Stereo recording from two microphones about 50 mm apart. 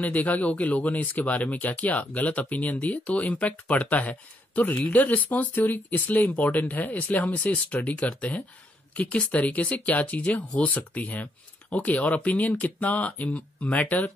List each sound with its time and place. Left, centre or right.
0.0 s speech: left